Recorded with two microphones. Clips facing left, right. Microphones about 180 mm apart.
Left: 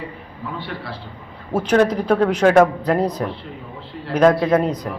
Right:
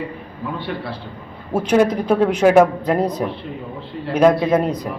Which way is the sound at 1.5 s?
10° right (ahead or behind).